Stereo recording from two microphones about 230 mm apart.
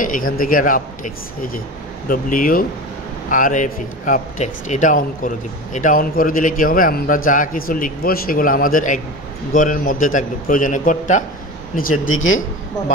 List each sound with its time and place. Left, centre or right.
0.0 s speech: left
12.1 s a man's voice: left